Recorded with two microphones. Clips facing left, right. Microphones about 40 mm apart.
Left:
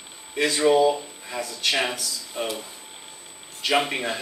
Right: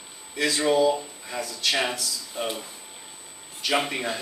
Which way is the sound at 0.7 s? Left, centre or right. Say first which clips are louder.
Left 2 dB; left.